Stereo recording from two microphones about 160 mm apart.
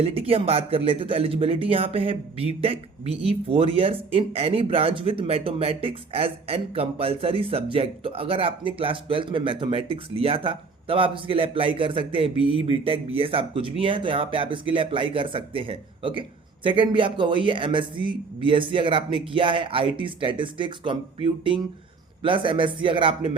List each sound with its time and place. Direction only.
0.0 s speech: 35° right (ahead or behind)